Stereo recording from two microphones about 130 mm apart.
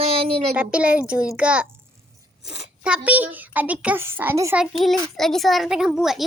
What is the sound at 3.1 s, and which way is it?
A child's voice, 15° right (ahead or behind).